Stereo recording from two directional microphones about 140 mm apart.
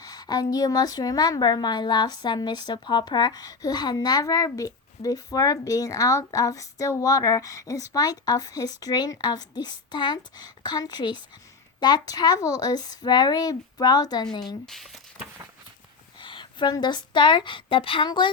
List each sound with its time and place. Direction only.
0.0 s a woman's voice: 30° left (ahead or behind)
14.4 s speech: centre (ahead or behind)
16.2 s a woman's voice: 35° left (ahead or behind)